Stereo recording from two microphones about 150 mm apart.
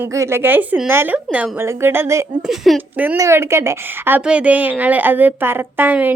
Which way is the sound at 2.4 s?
Centre (ahead or behind).